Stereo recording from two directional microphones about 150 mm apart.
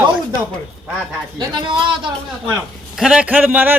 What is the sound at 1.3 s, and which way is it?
Speech, 30° right (ahead or behind).